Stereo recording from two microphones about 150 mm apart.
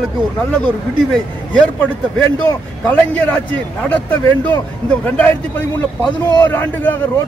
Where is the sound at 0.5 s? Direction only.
5° left (ahead or behind).